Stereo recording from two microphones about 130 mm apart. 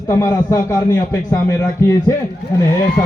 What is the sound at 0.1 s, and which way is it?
A man's voice, 20° left (ahead or behind).